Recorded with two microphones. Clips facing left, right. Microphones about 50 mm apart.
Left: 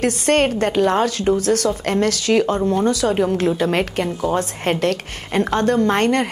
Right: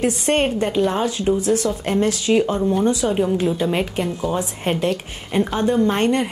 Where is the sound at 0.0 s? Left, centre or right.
Left.